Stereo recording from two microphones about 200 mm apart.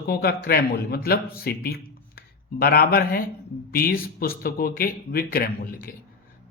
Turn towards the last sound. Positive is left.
turn(degrees=45)  # may be behind; listen again after turning